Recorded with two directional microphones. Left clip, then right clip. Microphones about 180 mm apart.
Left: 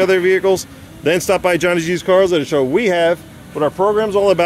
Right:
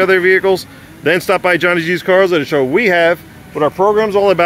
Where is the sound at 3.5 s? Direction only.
15° right (ahead or behind).